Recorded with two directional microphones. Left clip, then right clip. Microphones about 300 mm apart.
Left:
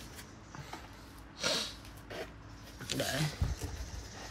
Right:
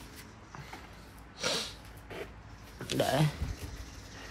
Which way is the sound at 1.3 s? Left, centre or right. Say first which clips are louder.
Right 1 dB; centre.